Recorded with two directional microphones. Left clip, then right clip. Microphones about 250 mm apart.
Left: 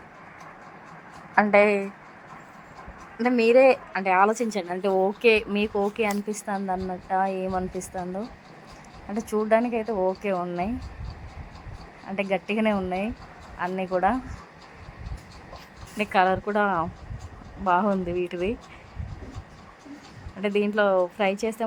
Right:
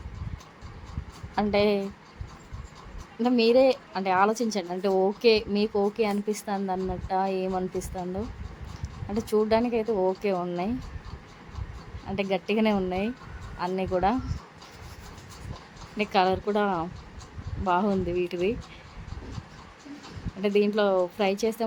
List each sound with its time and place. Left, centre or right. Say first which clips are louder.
1.5 s a woman's voice: left 4 dB; left
3.2 s a woman's voice: left 2 dB; left
3.9 s a woman's voice: left 3 dB; centre
5.2 s a woman's voice: left 2 dB; centre
9.3 s a woman's voice: left 1 dB; centre
12.1 s a woman's voice: left 1 dB; centre
16.0 s a woman's voice: left 2 dB; centre
20.4 s a woman's voice: left 1 dB; centre